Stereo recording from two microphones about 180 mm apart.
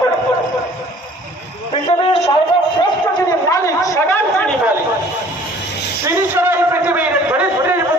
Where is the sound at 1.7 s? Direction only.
30° left (ahead or behind).